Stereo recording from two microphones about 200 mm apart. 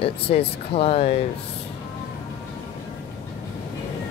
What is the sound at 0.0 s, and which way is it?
Speech, 30° left (ahead or behind).